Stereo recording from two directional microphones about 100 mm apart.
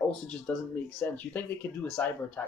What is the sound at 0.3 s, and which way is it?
Speech, 10° left (ahead or behind).